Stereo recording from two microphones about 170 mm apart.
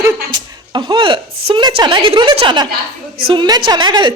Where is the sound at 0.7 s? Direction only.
25° right (ahead or behind).